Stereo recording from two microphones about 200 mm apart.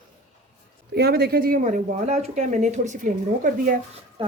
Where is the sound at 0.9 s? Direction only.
55° right (ahead or behind).